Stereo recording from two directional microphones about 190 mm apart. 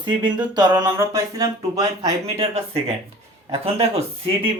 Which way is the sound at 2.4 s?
30° right (ahead or behind).